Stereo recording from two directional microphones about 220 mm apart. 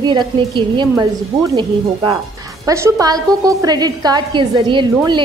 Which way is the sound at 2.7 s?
15° right (ahead or behind).